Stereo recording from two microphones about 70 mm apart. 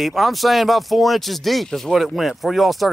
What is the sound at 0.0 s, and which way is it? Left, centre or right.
Speech, centre.